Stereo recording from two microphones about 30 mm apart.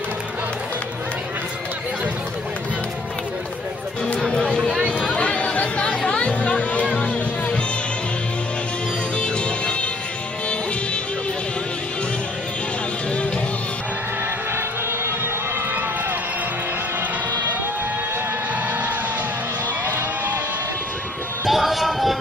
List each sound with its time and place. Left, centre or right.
4.4 s chatter: centre
5.1 s chatter: left
7.0 s music: left
9.2 s music: left
21.5 s a sound: centre